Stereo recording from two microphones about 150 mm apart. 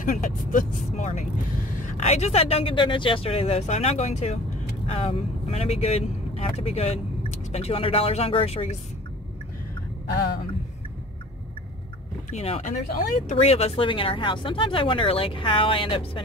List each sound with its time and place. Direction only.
0.0 s speech: 60° left (ahead or behind); by 8.7 s 40° left (ahead or behind)
12.3 s speech: 45° left (ahead or behind)
12.7 s speech: 70° left (ahead or behind)
13.4 s speech: 45° left (ahead or behind)